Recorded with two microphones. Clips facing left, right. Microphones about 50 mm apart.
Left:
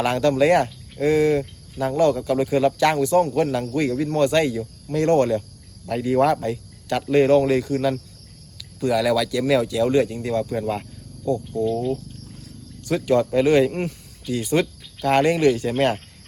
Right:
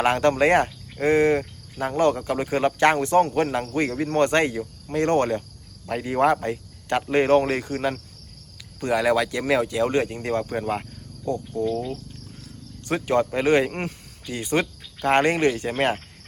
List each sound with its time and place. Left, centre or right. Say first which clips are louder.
0.0 s speech: left 1 dB; right
5.8 s speech: left 2 dB; right
11.7 s speech: left 4 dB; centre
12.9 s speech: left 3 dB; right